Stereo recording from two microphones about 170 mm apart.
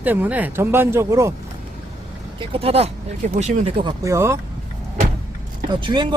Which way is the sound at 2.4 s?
35° right (ahead or behind).